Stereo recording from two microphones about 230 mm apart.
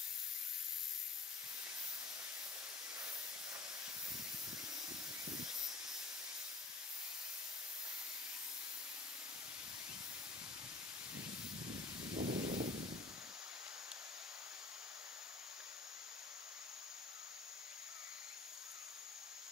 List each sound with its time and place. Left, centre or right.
12.2 s rustling leaves: right